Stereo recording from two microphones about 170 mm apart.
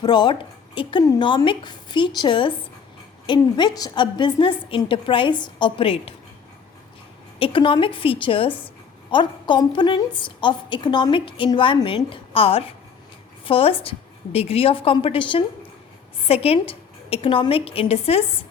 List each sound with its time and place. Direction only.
0.0 s a woman's voice: 25° left (ahead or behind)
7.3 s a woman's voice: 30° left (ahead or behind)